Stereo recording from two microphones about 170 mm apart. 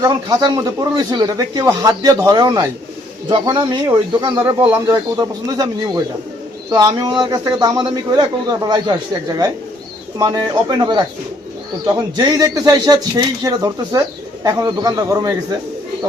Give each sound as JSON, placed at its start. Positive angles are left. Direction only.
{"t": 0.0, "sound": "speech", "side_deg": -25}